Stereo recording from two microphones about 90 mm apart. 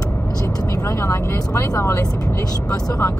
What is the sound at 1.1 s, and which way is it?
Speech, 35° left (ahead or behind).